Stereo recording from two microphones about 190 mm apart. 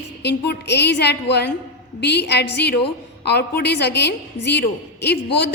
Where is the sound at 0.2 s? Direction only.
65° left (ahead or behind).